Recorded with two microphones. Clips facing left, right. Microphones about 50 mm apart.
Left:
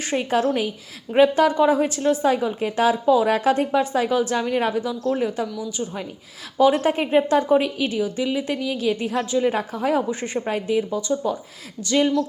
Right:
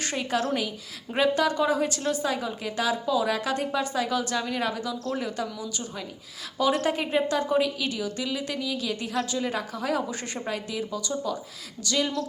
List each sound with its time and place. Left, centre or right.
0.0 s a woman's voice: left
10.1 s speech: centre
10.4 s a woman's voice: left